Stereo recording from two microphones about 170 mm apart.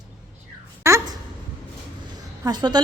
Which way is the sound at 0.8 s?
20° right (ahead or behind).